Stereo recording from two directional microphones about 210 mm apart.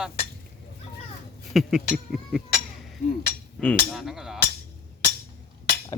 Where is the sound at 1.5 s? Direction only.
Centre (ahead or behind).